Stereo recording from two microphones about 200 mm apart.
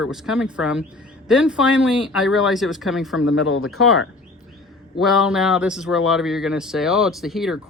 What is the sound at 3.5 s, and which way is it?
Speech, 90° left.